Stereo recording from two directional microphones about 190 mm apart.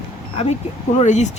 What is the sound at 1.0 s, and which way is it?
Speech, 40° left (ahead or behind).